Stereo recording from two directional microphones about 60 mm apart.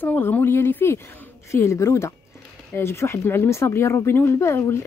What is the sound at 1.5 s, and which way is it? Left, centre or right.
Speech, left.